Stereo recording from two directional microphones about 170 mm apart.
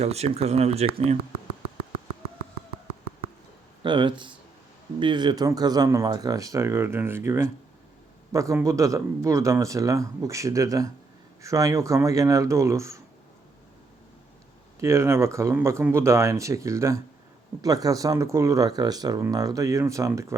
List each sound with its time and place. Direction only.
0.0 s speech: 40° right (ahead or behind)
3.8 s speech: 30° right (ahead or behind)
14.8 s speech: 15° right (ahead or behind)